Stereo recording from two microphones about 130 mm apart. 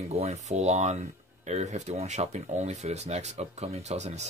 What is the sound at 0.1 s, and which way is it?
Speech, 55° right (ahead or behind).